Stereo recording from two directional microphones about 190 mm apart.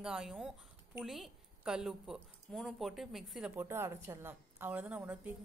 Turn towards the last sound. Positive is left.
turn(degrees=-10)  # may be behind; listen again after turning